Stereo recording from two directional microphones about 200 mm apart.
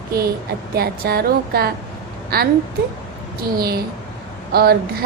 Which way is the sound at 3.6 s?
50° right (ahead or behind).